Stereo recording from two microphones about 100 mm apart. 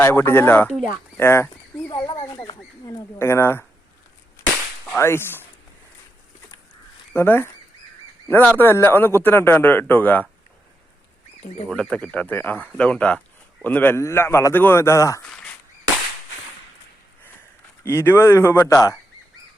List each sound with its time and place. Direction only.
0.0 s a man's voice: 25° left (ahead or behind)
1.9 s speech: 45° left (ahead or behind)
3.2 s a man's voice: 25° left (ahead or behind)
4.9 s a man's voice: 25° left (ahead or behind)
7.1 s speech: 25° left (ahead or behind)
8.5 s a man's voice: 20° left (ahead or behind)
11.7 s a man's voice: 10° left (ahead or behind); by 15.2 s 30° left (ahead or behind)
17.8 s a man's voice: 25° left (ahead or behind)